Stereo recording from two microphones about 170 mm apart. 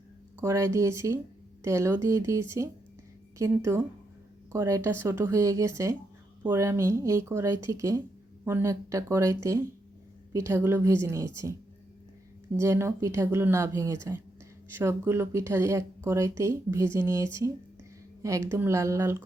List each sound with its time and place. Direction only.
0.4 s speech: 15° right (ahead or behind)
12.5 s speech: 15° right (ahead or behind)